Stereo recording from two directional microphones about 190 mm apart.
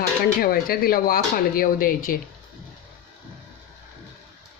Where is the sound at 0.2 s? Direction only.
50° left (ahead or behind).